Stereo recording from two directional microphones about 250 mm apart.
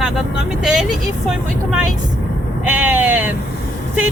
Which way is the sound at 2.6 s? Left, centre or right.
Centre.